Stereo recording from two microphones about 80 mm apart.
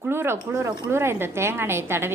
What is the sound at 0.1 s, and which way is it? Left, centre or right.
Speech, right.